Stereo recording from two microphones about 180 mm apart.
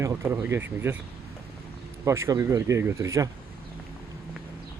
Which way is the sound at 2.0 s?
15° right (ahead or behind).